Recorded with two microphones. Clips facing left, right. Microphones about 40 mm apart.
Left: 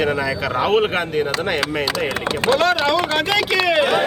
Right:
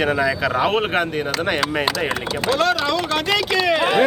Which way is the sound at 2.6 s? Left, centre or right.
Centre.